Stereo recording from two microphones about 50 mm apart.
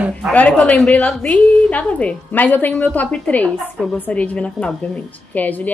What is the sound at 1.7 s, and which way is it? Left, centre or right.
Speech, left.